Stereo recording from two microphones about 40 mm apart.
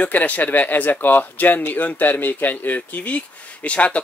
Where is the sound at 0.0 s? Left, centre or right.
Left.